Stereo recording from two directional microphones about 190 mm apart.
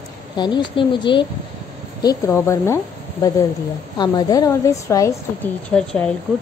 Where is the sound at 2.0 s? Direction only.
15° left (ahead or behind).